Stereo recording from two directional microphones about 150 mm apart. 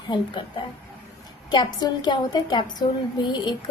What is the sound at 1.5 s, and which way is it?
A woman's voice, 30° left (ahead or behind).